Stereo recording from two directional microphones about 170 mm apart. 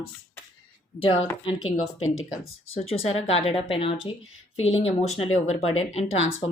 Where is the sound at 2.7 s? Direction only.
35° left (ahead or behind).